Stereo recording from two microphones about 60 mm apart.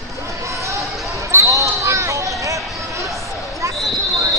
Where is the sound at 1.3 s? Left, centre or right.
Right.